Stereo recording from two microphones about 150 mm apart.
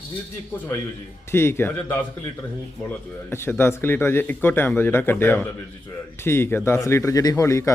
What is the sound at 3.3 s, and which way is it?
A man's voice, 15° left (ahead or behind).